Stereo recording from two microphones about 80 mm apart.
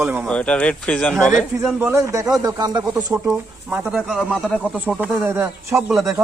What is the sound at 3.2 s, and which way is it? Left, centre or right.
Speech, centre.